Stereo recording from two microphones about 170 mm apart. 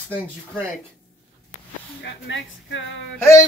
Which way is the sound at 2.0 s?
90° left.